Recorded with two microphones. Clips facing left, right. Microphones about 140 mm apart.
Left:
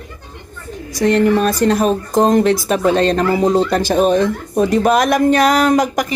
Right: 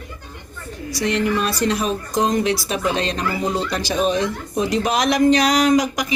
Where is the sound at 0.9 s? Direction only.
50° left (ahead or behind).